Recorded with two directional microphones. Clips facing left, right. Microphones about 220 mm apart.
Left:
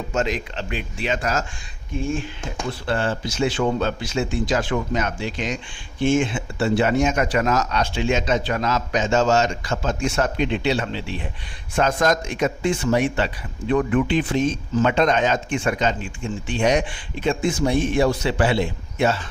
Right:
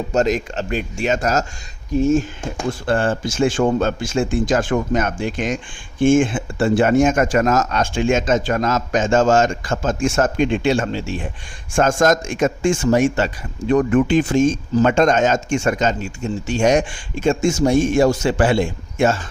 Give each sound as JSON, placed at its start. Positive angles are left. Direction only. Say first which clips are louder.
{"t": 0.1, "sound": "a man's voice", "louder": "right 6 dB", "side_deg": -40}